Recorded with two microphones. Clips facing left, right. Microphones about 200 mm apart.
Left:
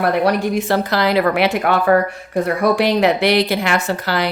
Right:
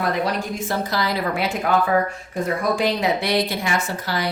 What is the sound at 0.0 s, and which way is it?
A woman's voice, 65° left (ahead or behind).